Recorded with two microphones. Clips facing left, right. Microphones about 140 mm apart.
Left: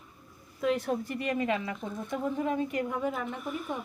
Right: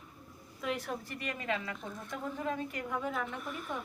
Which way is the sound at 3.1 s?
5° left (ahead or behind).